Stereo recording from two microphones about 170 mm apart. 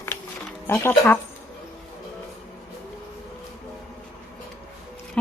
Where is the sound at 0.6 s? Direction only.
15° left (ahead or behind).